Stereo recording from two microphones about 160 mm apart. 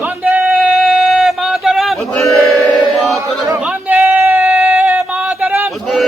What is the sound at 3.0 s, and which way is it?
Chant, centre (ahead or behind).